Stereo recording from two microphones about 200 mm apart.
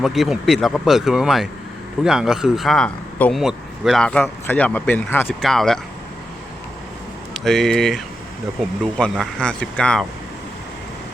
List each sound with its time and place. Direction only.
0.0 s a man's voice: centre (ahead or behind)
7.3 s a man's voice: centre (ahead or behind)